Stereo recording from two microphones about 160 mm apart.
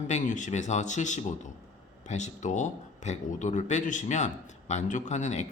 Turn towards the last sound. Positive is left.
turn(degrees=45)  # may be behind; listen again after turning